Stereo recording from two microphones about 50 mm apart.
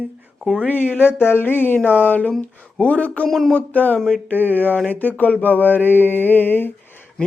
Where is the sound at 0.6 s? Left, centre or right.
Left.